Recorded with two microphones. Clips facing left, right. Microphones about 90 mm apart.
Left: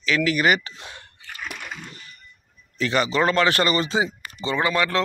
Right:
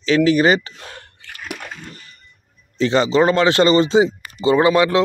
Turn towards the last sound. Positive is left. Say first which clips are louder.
# right 9 dB
turn(degrees=-20)  # may be behind; listen again after turning